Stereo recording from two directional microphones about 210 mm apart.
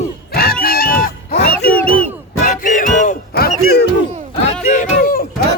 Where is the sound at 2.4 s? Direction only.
40° left (ahead or behind).